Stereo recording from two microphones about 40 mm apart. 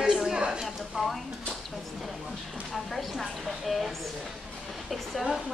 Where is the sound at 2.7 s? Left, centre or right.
Centre.